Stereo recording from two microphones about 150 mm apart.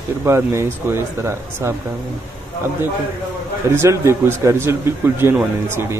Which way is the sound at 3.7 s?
20° right (ahead or behind).